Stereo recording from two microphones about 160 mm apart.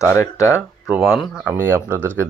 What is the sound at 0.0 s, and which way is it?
Speech, 15° left (ahead or behind).